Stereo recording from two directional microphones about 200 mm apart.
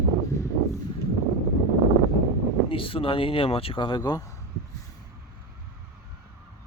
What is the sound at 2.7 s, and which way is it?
Speech, 25° left (ahead or behind).